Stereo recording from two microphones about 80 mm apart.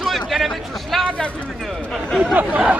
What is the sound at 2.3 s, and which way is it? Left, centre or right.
Speech, centre.